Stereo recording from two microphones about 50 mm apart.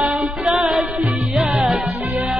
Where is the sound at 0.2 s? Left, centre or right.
Centre.